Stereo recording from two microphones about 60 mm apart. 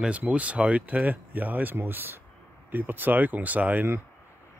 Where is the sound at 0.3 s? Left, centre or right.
Right.